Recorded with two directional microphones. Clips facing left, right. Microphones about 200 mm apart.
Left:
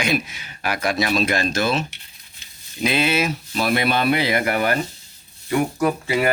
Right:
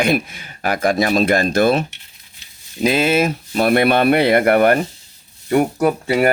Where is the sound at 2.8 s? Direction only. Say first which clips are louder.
Right 5 dB; 45° right (ahead or behind).